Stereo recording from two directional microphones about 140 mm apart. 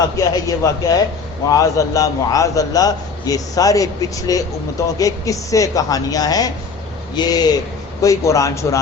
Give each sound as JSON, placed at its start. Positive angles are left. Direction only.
{"t": 0.2, "sound": "a man's voice", "side_deg": 25}